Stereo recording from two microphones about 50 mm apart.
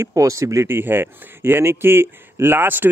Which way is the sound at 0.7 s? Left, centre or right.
Right.